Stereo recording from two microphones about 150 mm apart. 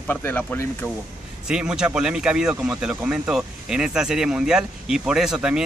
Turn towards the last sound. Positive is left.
turn(degrees=-5)  # may be behind; listen again after turning